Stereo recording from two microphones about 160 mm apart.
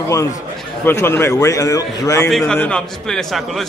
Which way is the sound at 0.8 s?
15° left (ahead or behind).